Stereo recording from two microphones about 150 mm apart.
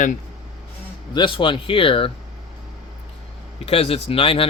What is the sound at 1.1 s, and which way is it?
Speech, 30° left (ahead or behind).